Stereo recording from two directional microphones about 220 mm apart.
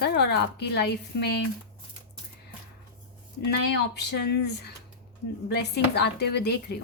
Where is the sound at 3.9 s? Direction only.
50° left (ahead or behind).